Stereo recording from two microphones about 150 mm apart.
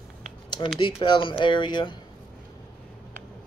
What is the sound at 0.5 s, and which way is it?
Speech, 30° left (ahead or behind).